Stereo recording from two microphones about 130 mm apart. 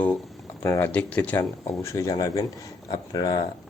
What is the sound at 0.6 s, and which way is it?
Speech, 20° left (ahead or behind).